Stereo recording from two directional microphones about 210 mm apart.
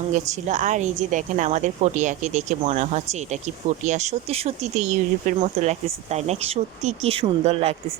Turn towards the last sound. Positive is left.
turn(degrees=-30)  # may be behind; listen again after turning